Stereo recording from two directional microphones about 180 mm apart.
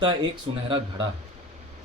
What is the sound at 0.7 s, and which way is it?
Speech, 25° right (ahead or behind).